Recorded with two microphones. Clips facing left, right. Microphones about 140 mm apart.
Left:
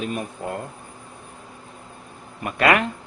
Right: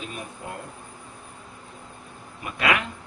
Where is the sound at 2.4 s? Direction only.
55° left (ahead or behind).